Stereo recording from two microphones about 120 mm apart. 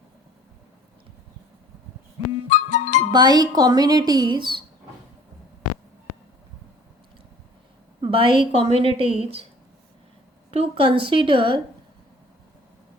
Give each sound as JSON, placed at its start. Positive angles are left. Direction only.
{"t": 2.5, "sound": "music", "side_deg": 90}
{"t": 3.1, "sound": "speech", "side_deg": -35}
{"t": 8.0, "sound": "a woman's voice", "side_deg": -45}
{"t": 10.5, "sound": "a woman's voice", "side_deg": -50}